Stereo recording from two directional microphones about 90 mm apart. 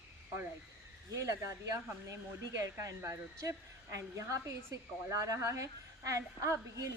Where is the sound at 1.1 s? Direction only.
35° right (ahead or behind).